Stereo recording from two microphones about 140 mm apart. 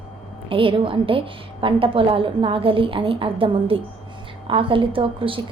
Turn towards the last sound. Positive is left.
turn(degrees=-40)  # may be behind; listen again after turning